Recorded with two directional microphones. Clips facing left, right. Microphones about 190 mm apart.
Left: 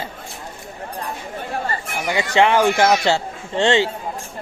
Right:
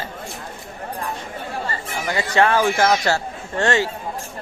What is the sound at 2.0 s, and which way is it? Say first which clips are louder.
A man's voice: left 2 dB; 15° left (ahead or behind).